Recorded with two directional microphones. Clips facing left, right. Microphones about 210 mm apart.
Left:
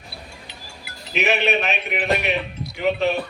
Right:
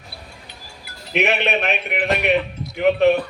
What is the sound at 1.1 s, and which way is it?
Speech, 55° right (ahead or behind).